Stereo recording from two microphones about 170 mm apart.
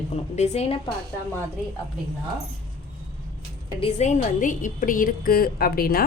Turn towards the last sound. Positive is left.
turn(degrees=60)  # may be behind; listen again after turning